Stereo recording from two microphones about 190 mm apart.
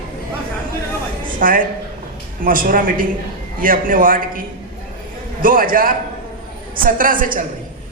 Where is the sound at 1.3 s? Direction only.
45° right (ahead or behind).